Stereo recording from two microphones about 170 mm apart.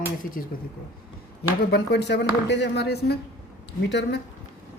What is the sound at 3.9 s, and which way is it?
Speech, 90° left.